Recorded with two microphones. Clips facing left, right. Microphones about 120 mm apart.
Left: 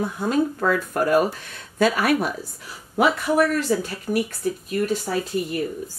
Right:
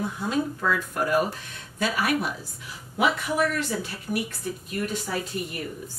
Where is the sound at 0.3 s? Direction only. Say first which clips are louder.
Left 5 dB; 50° left (ahead or behind).